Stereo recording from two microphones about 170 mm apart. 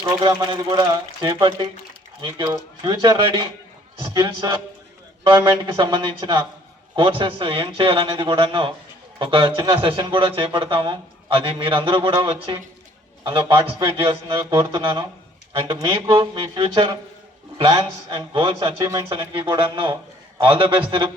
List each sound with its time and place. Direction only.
0.0 s a man's voice: 25° right (ahead or behind)
18.9 s speech: 20° right (ahead or behind)
19.1 s speech: 30° right (ahead or behind)